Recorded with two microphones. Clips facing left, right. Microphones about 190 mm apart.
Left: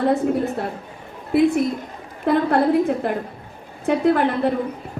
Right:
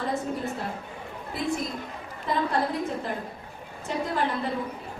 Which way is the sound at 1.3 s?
60° left (ahead or behind).